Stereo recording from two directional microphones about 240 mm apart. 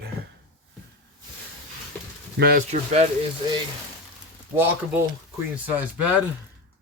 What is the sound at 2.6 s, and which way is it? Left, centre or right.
Speech, right.